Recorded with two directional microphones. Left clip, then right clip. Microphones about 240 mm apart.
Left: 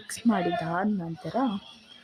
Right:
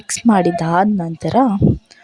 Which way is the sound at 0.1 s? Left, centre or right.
Right.